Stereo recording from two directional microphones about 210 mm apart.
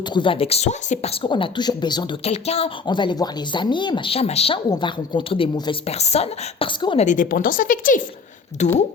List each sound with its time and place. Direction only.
0.1 s speech: 25° left (ahead or behind)